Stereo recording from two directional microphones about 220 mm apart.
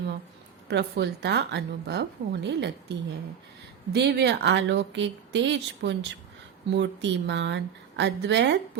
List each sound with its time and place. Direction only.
0.7 s a woman's voice: 50° right (ahead or behind)